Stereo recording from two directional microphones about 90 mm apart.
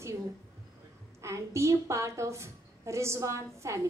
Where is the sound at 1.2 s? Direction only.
30° right (ahead or behind).